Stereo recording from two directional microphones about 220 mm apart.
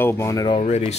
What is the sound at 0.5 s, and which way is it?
Speech, 30° left (ahead or behind).